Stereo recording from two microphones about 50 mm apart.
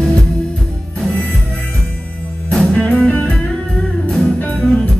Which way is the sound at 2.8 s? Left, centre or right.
Left.